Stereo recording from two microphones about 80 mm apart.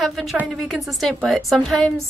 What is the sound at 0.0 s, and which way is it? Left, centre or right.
Speech, centre.